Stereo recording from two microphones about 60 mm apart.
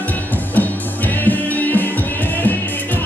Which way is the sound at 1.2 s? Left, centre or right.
Left.